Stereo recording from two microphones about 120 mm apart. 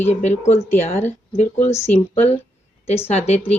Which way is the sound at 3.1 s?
65° left (ahead or behind).